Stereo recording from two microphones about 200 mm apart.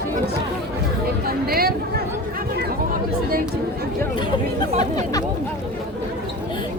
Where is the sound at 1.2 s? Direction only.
50° right (ahead or behind).